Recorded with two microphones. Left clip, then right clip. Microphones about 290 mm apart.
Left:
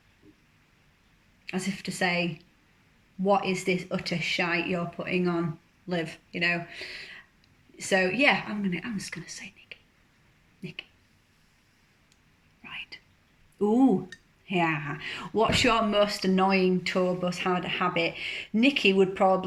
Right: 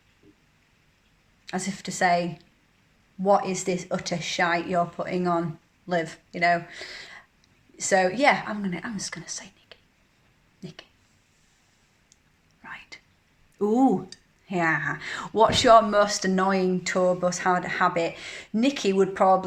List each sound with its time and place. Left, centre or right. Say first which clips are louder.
1.5 s speech: right 2 dB; centre
3.2 s speech: right 3 dB; centre
12.6 s whispering: left 1 dB; centre
13.6 s speech: right 2 dB; centre